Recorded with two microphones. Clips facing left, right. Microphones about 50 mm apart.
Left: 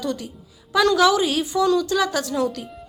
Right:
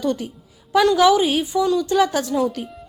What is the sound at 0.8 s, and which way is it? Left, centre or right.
A woman's voice, centre.